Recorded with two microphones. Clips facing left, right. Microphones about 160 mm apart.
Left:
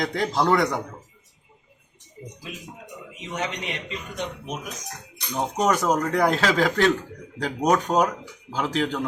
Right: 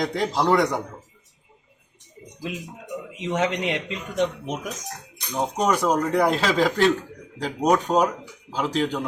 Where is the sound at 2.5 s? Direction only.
90° right.